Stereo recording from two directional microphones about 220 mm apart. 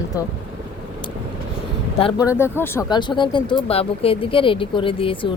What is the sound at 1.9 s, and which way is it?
Speech, 25° left (ahead or behind).